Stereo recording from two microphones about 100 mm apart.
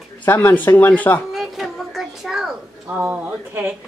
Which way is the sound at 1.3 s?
Centre (ahead or behind).